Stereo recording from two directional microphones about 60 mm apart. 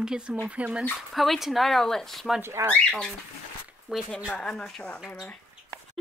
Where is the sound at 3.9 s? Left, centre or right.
Centre.